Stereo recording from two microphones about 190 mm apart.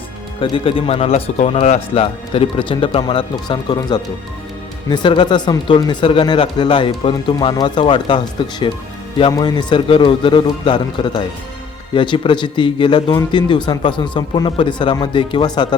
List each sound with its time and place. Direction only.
0.3 s speech: 25° left (ahead or behind)